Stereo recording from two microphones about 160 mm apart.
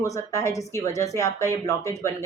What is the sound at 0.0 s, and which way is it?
Speech, 20° left (ahead or behind).